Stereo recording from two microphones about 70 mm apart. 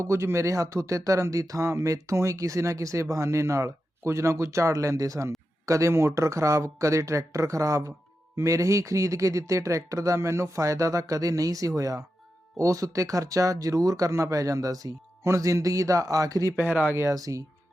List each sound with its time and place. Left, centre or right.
0.0 s speech: right
15.2 s a man's voice: right
16.6 s speech: right
17.2 s a man's voice: right